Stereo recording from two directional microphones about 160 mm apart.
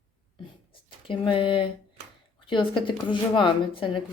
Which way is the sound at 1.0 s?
35° left (ahead or behind).